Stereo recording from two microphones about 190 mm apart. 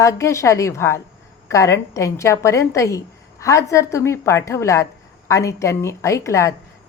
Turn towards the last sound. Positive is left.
turn(degrees=15)  # may be behind; listen again after turning